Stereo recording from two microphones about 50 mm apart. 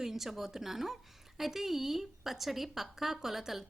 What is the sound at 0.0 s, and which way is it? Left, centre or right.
A woman's voice, centre.